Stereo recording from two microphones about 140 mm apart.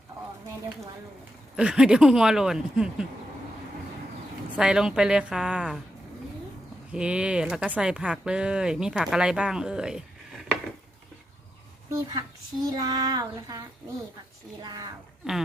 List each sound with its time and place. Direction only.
1.5 s speech: 5° right (ahead or behind)
4.5 s speech: 5° right (ahead or behind)
6.9 s speech: 5° right (ahead or behind)
11.9 s a sound: 20° right (ahead or behind)
14.6 s speech: 30° right (ahead or behind)